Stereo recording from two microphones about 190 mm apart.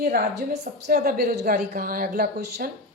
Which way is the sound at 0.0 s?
55° right (ahead or behind).